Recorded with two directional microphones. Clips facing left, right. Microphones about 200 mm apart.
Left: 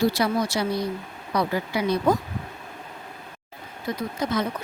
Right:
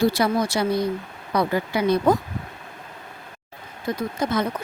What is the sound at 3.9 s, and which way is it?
Speech, 50° right (ahead or behind).